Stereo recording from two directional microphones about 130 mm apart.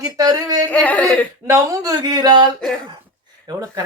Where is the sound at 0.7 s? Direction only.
10° left (ahead or behind).